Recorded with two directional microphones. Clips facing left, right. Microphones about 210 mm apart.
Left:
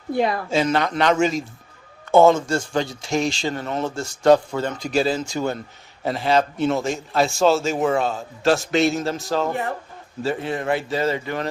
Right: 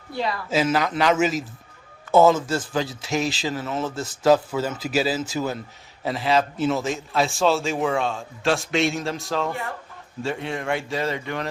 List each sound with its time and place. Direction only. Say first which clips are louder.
0.1 s speech: left 6 dB; 50° left (ahead or behind)
0.5 s speech: right 1 dB; 5° right (ahead or behind)